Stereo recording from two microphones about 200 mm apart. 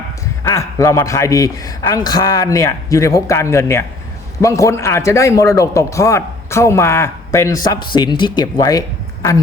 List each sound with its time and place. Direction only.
0.4 s a man's voice: 15° left (ahead or behind)